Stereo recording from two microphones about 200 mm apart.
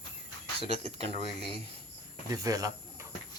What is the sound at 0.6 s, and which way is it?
Speech, 30° right (ahead or behind).